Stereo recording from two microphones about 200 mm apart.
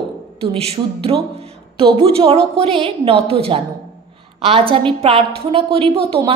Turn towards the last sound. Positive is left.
turn(degrees=-30)  # may be behind; listen again after turning